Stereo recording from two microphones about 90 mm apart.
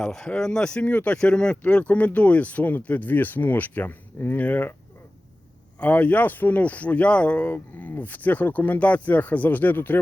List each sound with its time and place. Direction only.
0.0 s speech: 5° left (ahead or behind)
5.8 s speech: 15° left (ahead or behind)